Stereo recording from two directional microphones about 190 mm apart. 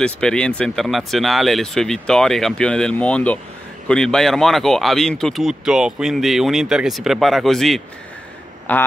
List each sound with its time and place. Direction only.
0.0 s speech: 5° left (ahead or behind)